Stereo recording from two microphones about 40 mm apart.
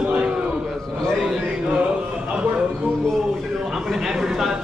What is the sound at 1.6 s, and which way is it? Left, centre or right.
A man's voice, right.